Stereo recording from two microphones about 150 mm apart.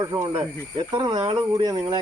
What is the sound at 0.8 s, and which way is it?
Speech, 40° right (ahead or behind).